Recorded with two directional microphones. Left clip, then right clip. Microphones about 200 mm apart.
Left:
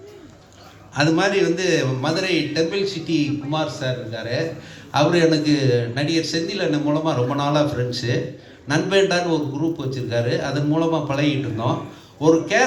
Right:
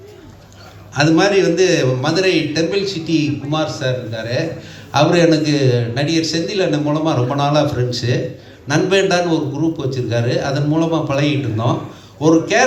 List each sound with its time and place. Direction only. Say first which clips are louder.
0.9 s a man's voice: right 5 dB; 20° right (ahead or behind)